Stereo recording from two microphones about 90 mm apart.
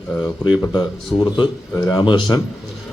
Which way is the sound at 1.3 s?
50° left (ahead or behind).